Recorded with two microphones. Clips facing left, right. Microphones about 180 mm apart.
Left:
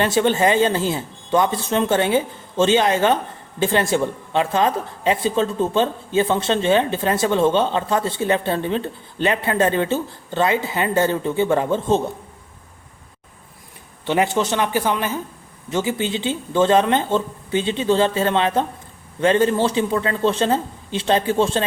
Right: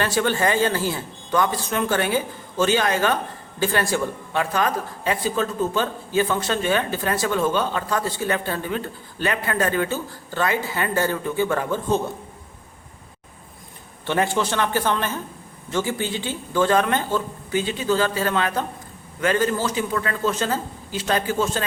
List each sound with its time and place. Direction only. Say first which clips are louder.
0.0 s a woman's voice: left 4 dB; 20° left (ahead or behind)
14.1 s a woman's voice: left 3 dB; 20° left (ahead or behind)